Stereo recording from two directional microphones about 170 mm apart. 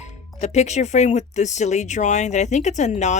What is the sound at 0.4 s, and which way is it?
Speech, 40° left (ahead or behind).